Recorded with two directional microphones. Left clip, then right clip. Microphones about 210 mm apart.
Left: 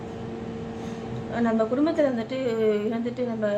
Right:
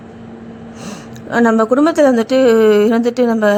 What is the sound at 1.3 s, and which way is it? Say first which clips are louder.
A woman's voice: right 12 dB; 40° right (ahead or behind).